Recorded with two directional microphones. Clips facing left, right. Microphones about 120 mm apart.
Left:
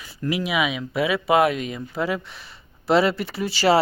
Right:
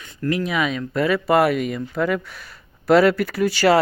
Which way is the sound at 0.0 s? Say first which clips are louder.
Right 3 dB; 10° left (ahead or behind).